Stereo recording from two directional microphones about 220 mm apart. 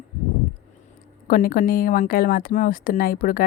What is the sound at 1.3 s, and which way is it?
Speech, 40° left (ahead or behind).